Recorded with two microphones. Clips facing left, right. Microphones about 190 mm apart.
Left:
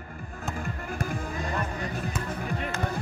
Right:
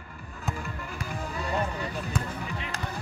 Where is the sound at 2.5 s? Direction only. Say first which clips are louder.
Left 5 dB; 50° left (ahead or behind).